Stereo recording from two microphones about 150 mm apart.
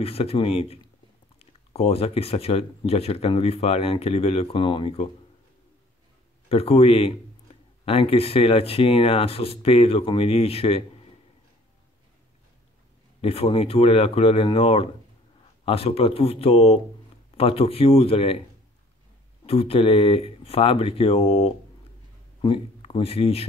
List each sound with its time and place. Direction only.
0.0 s speech: 40° left (ahead or behind)
6.5 s speech: 40° left (ahead or behind)
13.2 s speech: 40° left (ahead or behind)
19.4 s speech: 40° left (ahead or behind)